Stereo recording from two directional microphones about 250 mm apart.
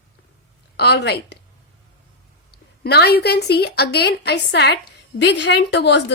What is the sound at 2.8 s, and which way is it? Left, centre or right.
A woman's voice, left.